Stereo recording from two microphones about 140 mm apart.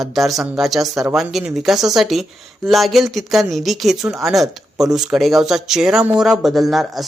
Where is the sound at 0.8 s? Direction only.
25° right (ahead or behind).